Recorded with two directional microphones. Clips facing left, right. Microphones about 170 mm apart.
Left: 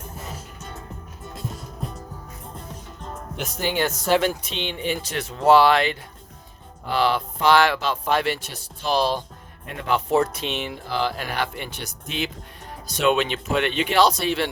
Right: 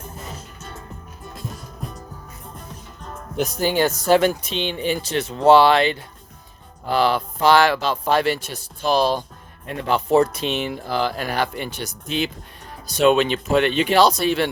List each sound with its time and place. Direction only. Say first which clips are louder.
0.3 s music: even; 15° left (ahead or behind)
3.3 s speech: right 5 dB; 40° right (ahead or behind)
6.9 s speech: right 3 dB; 40° right (ahead or behind)
9.8 s speech: right 3 dB; 35° right (ahead or behind)